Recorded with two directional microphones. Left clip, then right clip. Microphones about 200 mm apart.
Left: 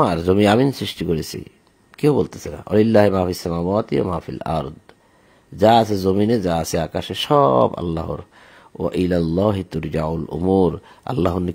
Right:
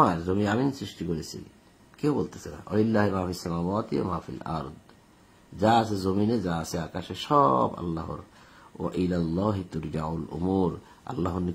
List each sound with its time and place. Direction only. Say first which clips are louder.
0.0 s speech: left 8 dB; 45° left (ahead or behind)